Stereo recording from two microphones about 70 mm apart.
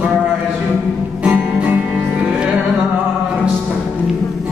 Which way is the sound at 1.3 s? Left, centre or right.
Right.